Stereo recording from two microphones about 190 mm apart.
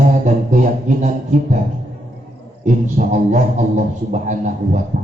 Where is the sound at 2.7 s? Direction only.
40° right (ahead or behind).